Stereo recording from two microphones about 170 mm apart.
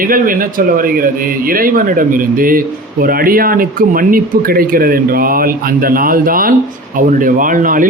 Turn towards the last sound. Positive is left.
turn(degrees=-50)  # may be behind; listen again after turning